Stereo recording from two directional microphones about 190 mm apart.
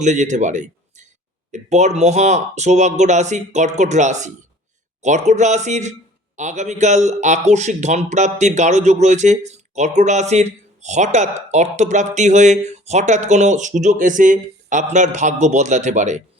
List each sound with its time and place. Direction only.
0.0 s a man's voice: 40° right (ahead or behind)